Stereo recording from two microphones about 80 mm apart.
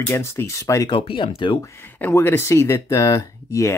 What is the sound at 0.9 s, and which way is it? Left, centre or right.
Speech, left.